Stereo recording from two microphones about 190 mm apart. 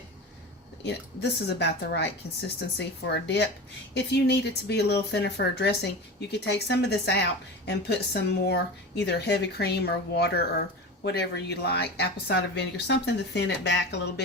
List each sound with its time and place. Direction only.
0.9 s speech: 60° left (ahead or behind)